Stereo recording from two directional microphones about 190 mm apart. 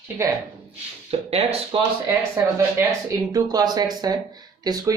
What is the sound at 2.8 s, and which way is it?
Speech, 20° right (ahead or behind).